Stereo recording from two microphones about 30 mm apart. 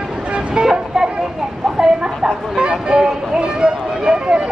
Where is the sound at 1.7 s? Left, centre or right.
Right.